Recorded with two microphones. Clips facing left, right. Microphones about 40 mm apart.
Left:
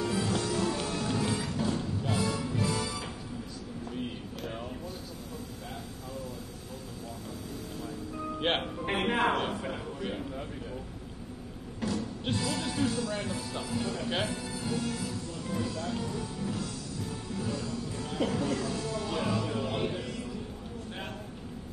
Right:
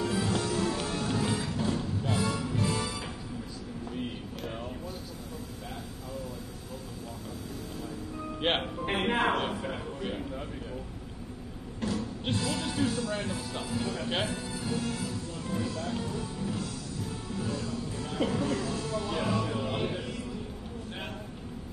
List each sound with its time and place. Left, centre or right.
0.0 s music: centre
0.3 s music: centre
4.4 s a sound: centre
8.4 s music: centre
11.9 s music: centre
12.5 s speech: centre
14.8 s music: right
15.0 s music: centre
15.7 s speech: centre
16.2 s music: centre
17.6 s music: centre